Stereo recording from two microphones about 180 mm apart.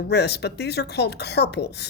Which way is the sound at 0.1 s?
65° left (ahead or behind).